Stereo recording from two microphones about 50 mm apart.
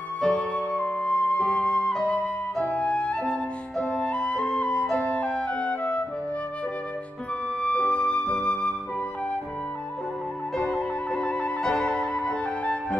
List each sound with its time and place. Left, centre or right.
0.2 s flute: left
2.5 s music: left
7.6 s flute: left
10.5 s music: centre